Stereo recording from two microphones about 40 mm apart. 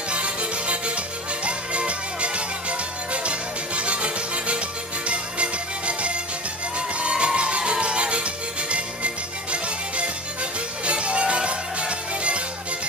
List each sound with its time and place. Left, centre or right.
0.1 s music: right